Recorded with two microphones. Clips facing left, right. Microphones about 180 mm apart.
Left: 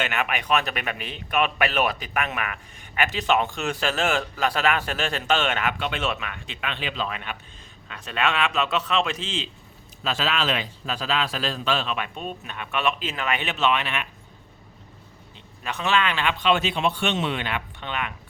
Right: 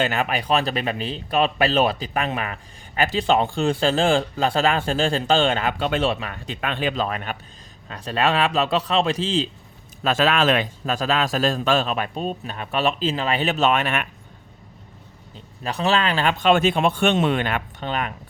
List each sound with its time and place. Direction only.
0.0 s speech: 35° right (ahead or behind)
10.0 s a man's voice: 50° right (ahead or behind)
15.6 s a man's voice: 35° right (ahead or behind)